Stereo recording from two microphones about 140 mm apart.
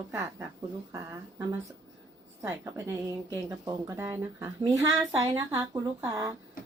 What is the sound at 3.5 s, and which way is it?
Speech, 20° right (ahead or behind).